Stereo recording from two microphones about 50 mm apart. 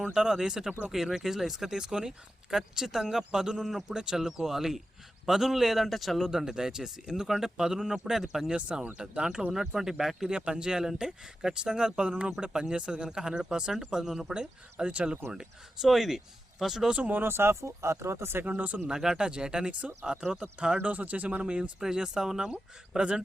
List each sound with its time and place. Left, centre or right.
0.0 s a man's voice: centre
6.2 s speech: centre
8.5 s speech: right; by 14.3 s centre
14.3 s speech: right
17.1 s speech: right
18.4 s speech: right
18.9 s speech: centre
20.7 s speech: right